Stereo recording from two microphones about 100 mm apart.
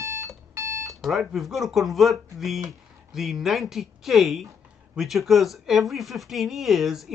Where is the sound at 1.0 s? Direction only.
Centre (ahead or behind).